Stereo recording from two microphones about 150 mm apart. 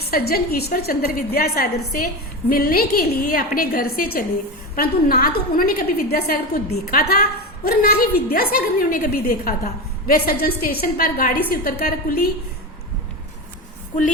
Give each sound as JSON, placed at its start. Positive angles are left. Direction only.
{"t": 0.1, "sound": "a woman's voice", "side_deg": 90}
{"t": 11.6, "sound": "a woman's voice", "side_deg": 80}